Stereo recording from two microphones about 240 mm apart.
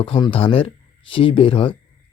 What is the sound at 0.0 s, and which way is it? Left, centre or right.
Speech, left.